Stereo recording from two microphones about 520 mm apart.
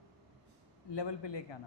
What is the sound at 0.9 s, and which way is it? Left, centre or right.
Speech, left.